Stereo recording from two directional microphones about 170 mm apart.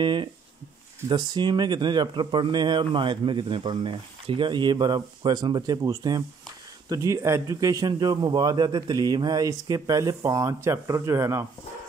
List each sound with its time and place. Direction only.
0.0 s speech: 25° right (ahead or behind)